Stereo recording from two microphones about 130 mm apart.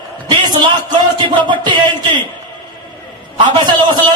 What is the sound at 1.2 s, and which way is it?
A man's voice, 35° right (ahead or behind).